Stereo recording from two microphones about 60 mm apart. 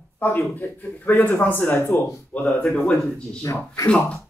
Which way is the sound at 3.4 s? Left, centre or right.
Left.